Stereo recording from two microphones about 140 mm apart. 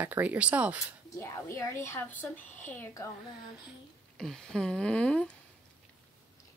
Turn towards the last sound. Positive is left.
turn(degrees=5)  # may be behind; listen again after turning